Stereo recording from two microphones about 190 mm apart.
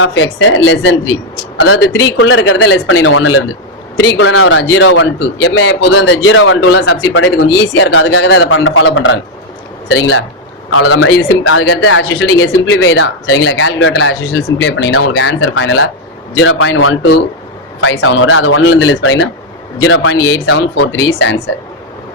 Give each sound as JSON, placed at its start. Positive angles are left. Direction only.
{"t": 0.0, "sound": "a man's voice", "side_deg": 90}